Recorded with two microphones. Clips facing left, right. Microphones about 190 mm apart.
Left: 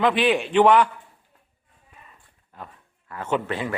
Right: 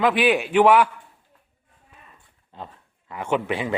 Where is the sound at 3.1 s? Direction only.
15° right (ahead or behind).